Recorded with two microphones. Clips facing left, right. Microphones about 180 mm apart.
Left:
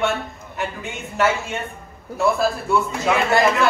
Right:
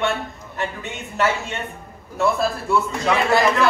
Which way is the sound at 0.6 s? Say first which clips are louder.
Even; centre (ahead or behind).